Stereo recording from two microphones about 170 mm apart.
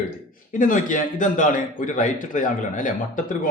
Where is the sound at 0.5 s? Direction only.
50° left (ahead or behind).